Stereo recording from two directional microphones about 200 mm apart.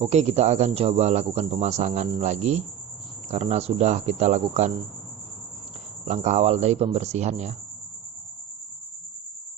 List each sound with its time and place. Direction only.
0.0 s speech: 35° right (ahead or behind)
6.1 s speech: 35° right (ahead or behind)